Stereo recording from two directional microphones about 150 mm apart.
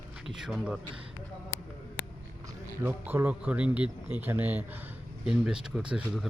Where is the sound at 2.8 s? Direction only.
15° right (ahead or behind).